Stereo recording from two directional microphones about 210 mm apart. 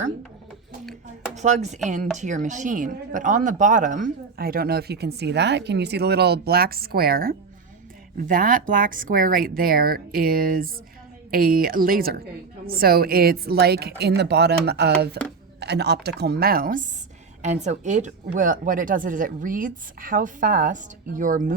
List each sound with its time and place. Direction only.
1.4 s speech: 35° right (ahead or behind)
17.4 s speech: 35° right (ahead or behind)